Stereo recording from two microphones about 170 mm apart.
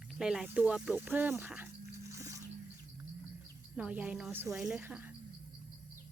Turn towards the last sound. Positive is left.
turn(degrees=-10)  # may be behind; listen again after turning